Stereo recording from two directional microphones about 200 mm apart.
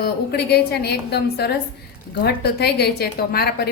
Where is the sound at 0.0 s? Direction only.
50° left (ahead or behind).